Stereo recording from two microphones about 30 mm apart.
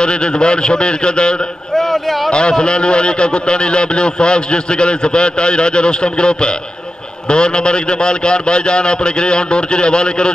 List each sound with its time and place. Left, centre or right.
0.0 s a man's voice: left
1.8 s a man's voice: centre
2.6 s a man's voice: left